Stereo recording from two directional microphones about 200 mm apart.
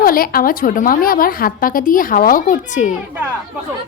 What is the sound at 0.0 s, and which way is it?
A woman's voice, 45° left (ahead or behind).